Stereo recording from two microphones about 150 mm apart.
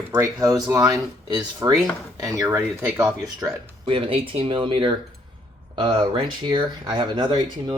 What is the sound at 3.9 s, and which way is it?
Speech, 40° right (ahead or behind).